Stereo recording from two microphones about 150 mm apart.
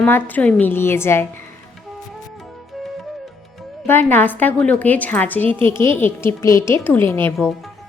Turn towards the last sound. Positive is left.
turn(degrees=15)  # may be behind; listen again after turning